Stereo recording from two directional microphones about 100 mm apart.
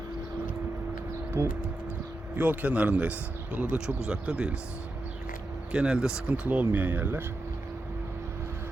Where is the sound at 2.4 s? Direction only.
15° right (ahead or behind).